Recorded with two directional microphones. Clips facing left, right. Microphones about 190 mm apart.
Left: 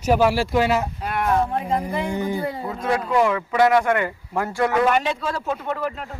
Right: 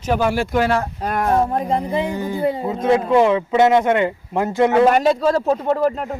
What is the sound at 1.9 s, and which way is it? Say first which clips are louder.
Speech: right 4 dB; 20° right (ahead or behind).